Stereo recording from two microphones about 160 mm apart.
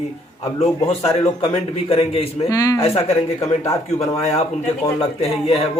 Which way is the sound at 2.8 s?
40° left (ahead or behind).